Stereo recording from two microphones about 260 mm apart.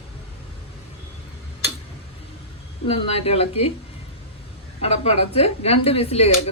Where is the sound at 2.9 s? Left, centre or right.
Left.